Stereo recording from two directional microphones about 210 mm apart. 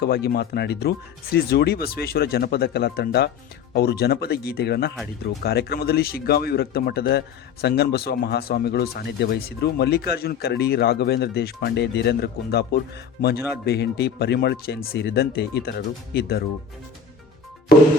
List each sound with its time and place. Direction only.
0.0 s speech: 50° left (ahead or behind)
13.7 s speech: 50° left (ahead or behind)
17.7 s music: 50° left (ahead or behind)